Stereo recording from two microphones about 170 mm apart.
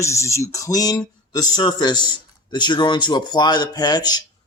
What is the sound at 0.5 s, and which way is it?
A man's voice, 20° left (ahead or behind).